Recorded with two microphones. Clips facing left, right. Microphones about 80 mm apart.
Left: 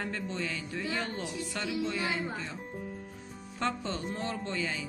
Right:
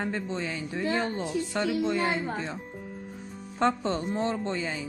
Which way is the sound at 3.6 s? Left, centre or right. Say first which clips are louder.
Right 7 dB; right.